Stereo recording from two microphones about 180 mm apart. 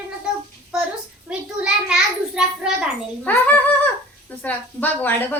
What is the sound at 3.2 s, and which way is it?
Speech, 10° left (ahead or behind).